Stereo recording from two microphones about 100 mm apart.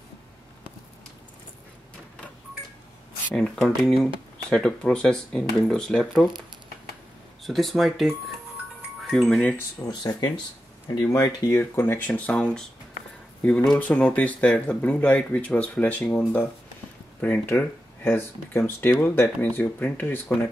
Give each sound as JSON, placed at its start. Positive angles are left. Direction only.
{"t": 3.3, "sound": "speech", "side_deg": 5}
{"t": 7.4, "sound": "speech", "side_deg": 0}
{"t": 9.8, "sound": "speech", "side_deg": 45}
{"t": 12.1, "sound": "speech", "side_deg": 10}
{"t": 13.7, "sound": "speech", "side_deg": 15}